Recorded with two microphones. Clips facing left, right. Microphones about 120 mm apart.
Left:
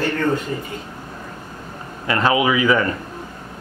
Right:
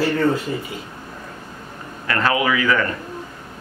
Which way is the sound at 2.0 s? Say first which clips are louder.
Left 2 dB; 20° left (ahead or behind).